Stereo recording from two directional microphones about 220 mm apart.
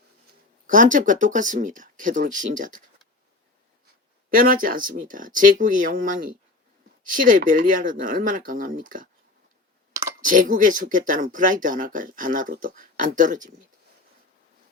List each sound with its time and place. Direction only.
0.7 s speech: 35° right (ahead or behind)
4.3 s speech: 40° right (ahead or behind)
10.2 s speech: 35° right (ahead or behind)